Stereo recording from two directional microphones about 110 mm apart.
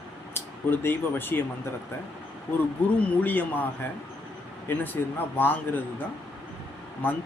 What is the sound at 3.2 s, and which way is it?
Speech, 15° left (ahead or behind).